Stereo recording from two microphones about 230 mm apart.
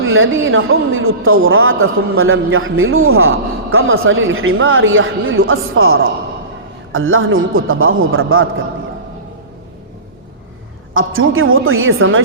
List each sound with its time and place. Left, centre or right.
0.0 s speech: right
10.9 s speech: right